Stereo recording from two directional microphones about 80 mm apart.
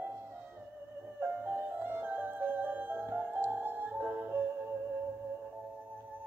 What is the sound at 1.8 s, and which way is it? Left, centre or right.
Music, right.